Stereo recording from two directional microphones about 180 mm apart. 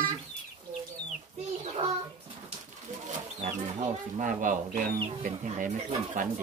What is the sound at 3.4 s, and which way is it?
Speech, 50° right (ahead or behind).